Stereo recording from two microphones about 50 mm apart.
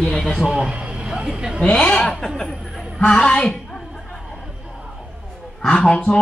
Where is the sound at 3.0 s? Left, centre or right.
Centre.